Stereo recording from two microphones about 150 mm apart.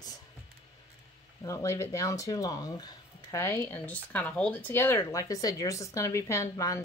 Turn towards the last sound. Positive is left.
turn(degrees=20)  # may be behind; listen again after turning